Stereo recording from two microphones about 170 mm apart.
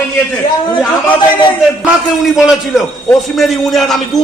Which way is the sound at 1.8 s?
5° right (ahead or behind).